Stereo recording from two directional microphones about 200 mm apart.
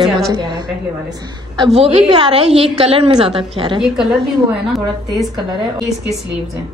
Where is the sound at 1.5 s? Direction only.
25° right (ahead or behind).